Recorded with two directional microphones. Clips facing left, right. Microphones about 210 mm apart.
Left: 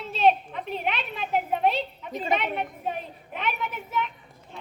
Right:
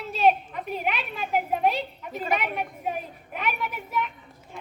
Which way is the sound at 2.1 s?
25° left (ahead or behind).